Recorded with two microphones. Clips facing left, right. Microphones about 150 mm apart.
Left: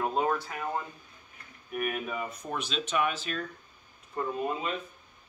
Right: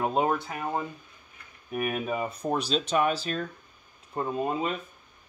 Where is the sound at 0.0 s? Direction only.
20° right (ahead or behind).